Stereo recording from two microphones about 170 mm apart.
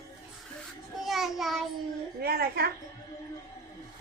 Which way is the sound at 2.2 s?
65° right (ahead or behind).